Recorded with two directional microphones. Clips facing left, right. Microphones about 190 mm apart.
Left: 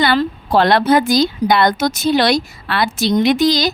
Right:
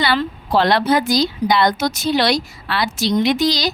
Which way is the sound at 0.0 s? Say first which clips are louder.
Left 4 dB; 50° left (ahead or behind).